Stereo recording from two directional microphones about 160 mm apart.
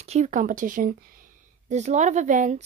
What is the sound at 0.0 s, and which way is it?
Speech, 45° right (ahead or behind).